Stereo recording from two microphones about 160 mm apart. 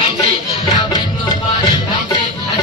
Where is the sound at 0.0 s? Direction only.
35° left (ahead or behind).